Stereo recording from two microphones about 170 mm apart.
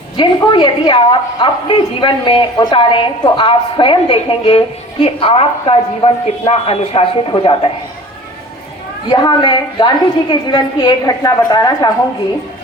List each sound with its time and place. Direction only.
0.5 s a woman's voice: 30° left (ahead or behind)
9.0 s a woman's voice: 25° left (ahead or behind)